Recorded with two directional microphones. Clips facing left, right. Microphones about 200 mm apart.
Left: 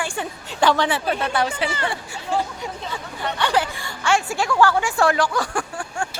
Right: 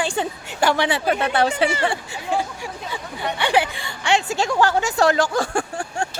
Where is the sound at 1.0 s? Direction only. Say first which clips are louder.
Right 3 dB; 50° right (ahead or behind).